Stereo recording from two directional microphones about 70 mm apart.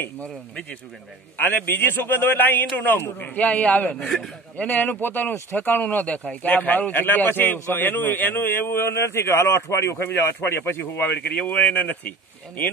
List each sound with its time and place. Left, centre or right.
0.2 s speech: centre
1.4 s speech: left